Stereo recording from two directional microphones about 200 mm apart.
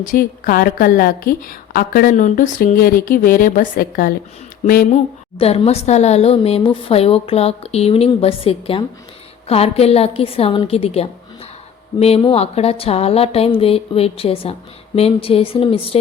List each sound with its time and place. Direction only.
0.0 s a woman's voice: 45° left (ahead or behind)
5.4 s a woman's voice: 30° left (ahead or behind)